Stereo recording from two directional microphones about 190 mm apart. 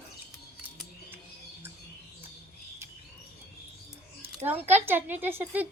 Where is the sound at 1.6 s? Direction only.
10° right (ahead or behind).